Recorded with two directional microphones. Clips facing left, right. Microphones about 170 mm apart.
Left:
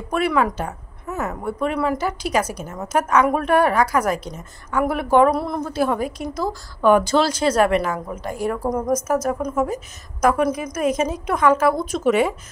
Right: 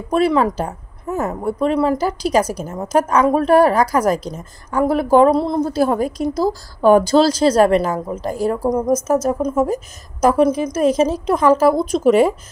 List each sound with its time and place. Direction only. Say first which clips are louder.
0.1 s a woman's voice: right 4 dB; 30° right (ahead or behind)
8.6 s a woman's voice: right 4 dB; 20° right (ahead or behind); by 12.4 s 35° right (ahead or behind)